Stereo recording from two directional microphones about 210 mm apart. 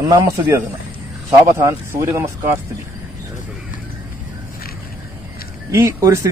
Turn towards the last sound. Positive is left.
turn(degrees=-15)  # may be behind; listen again after turning